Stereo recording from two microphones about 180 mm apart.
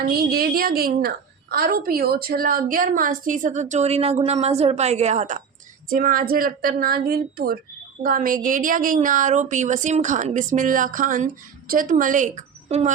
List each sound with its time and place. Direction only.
0.1 s a woman's voice: 55° right (ahead or behind); by 12.9 s 40° right (ahead or behind)